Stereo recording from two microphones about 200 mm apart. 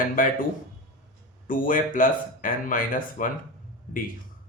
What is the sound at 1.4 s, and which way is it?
Speech, 45° left (ahead or behind).